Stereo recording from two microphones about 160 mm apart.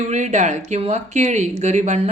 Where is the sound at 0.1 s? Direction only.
45° right (ahead or behind).